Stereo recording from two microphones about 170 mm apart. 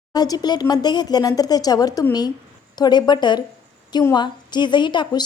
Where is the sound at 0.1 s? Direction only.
25° left (ahead or behind).